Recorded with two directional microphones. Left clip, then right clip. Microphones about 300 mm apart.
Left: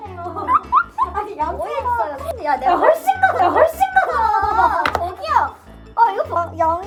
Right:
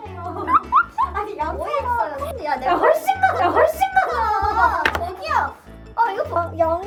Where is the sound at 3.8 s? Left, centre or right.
Left.